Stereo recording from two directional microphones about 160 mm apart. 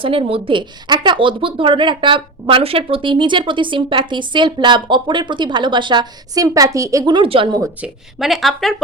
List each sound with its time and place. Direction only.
0.0 s speech: 35° right (ahead or behind)
7.8 s a woman's voice: centre (ahead or behind)